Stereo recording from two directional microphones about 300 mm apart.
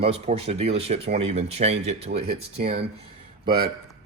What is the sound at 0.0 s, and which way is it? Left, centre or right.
Speech, centre.